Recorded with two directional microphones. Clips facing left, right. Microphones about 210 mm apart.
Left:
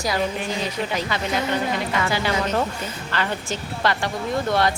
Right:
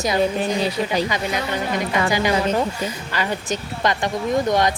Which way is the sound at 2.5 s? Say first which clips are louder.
Right 2 dB; 10° right (ahead or behind).